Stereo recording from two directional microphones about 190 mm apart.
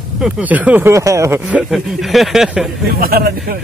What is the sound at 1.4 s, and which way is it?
Speech, 5° right (ahead or behind).